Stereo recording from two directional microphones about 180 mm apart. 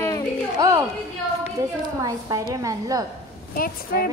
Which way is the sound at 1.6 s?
15° right (ahead or behind).